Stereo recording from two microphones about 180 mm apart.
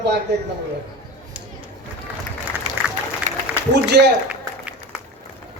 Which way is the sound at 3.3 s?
45° right (ahead or behind).